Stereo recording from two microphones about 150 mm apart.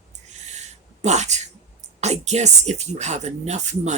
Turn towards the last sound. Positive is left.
turn(degrees=-50)  # may be behind; listen again after turning